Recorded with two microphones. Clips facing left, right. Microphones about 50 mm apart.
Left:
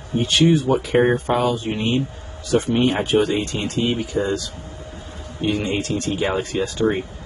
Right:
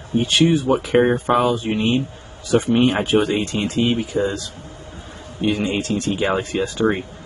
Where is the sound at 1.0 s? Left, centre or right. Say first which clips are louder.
Right 1 dB; centre.